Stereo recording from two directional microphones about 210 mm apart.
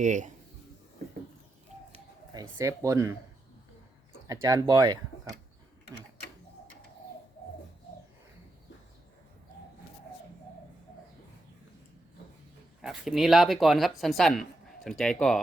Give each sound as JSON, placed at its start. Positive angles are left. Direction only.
{"t": 0.0, "sound": "speech", "side_deg": -35}
{"t": 2.3, "sound": "speech", "side_deg": -15}
{"t": 4.3, "sound": "speech", "side_deg": -15}
{"t": 12.8, "sound": "speech", "side_deg": 0}